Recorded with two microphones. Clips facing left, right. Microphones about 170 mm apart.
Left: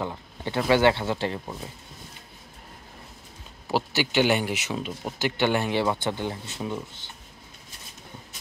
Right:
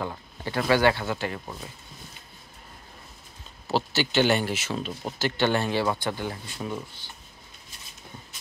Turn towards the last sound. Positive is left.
turn(degrees=20)  # may be behind; listen again after turning